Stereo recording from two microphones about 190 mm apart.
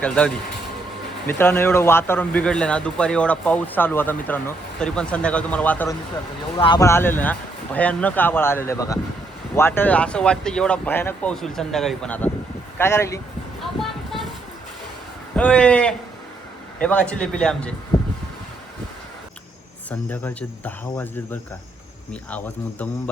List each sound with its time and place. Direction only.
0.0 s speech: 5° left (ahead or behind)
6.6 s speech: 20° left (ahead or behind)
15.4 s speech: 5° left (ahead or behind)
20.1 s speech: 10° left (ahead or behind)